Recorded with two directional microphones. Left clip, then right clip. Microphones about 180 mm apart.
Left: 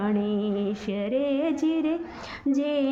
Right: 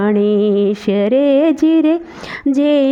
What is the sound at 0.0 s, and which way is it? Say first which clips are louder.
Speech: right 14 dB; 50° right (ahead or behind).